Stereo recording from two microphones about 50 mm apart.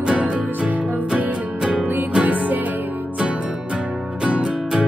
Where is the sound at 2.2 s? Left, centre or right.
Right.